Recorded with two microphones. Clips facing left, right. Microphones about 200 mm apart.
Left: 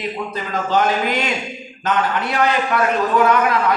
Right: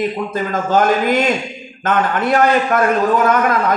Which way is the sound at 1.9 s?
50° right (ahead or behind).